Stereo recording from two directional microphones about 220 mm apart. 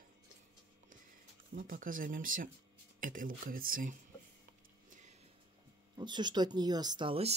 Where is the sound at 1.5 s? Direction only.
40° right (ahead or behind).